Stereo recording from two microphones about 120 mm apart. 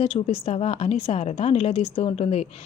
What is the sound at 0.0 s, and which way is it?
A woman's voice, 55° left (ahead or behind).